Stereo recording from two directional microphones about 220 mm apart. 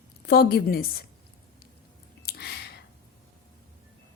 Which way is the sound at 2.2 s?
45° left (ahead or behind).